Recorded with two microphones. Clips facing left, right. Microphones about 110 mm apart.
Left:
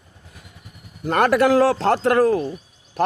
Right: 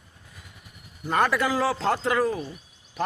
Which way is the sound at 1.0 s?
65° left (ahead or behind).